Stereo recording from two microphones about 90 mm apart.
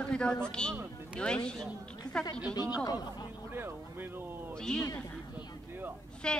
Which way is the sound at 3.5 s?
25° right (ahead or behind).